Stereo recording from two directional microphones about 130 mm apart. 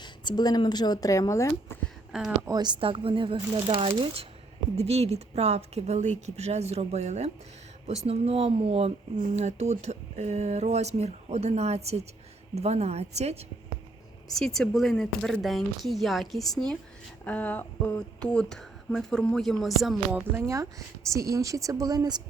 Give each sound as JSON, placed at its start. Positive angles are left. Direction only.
{"t": 0.0, "sound": "speech", "side_deg": 35}
{"t": 2.1, "sound": "speech", "side_deg": -5}
{"t": 2.5, "sound": "speech", "side_deg": -35}
{"t": 9.1, "sound": "speech", "side_deg": -60}
{"t": 14.3, "sound": "speech", "side_deg": 5}
{"t": 20.1, "sound": "speech", "side_deg": -15}